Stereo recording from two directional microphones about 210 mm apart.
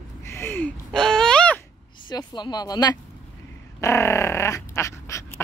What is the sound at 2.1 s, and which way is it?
Speech, 20° left (ahead or behind).